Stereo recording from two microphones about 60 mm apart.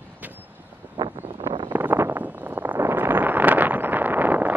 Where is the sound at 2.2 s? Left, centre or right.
Right.